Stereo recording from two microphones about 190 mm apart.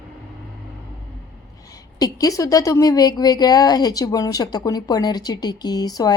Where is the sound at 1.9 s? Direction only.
20° left (ahead or behind).